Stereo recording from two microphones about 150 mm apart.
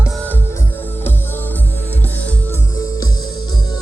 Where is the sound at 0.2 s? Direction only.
15° left (ahead or behind).